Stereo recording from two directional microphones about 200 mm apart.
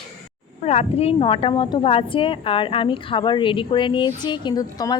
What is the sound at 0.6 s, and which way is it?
A woman's voice, 30° left (ahead or behind).